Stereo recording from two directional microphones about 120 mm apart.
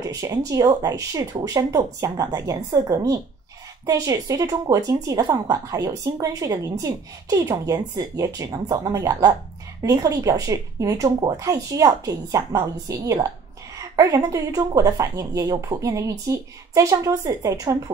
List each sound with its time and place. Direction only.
0.0 s a woman's voice: 30° right (ahead or behind)